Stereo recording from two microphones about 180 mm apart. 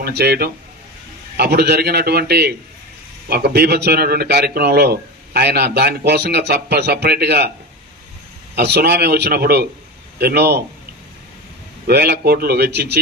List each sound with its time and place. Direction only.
0.0 s a man's voice: 65° right (ahead or behind)
8.5 s a man's voice: 65° right (ahead or behind)
11.9 s a man's voice: 65° right (ahead or behind)